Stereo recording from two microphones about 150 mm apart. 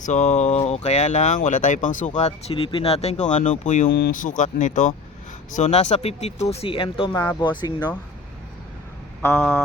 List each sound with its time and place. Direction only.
0.0 s speech: 50° left (ahead or behind); by 7.1 s 35° left (ahead or behind)
7.1 s speech: 20° left (ahead or behind)
9.2 s vehicle: 10° left (ahead or behind)